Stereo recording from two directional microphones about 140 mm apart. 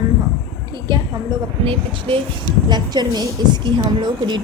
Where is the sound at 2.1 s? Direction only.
40° right (ahead or behind).